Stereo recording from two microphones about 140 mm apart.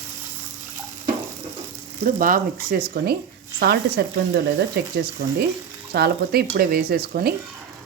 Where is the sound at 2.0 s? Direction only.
70° right (ahead or behind); by 3.2 s 90° right.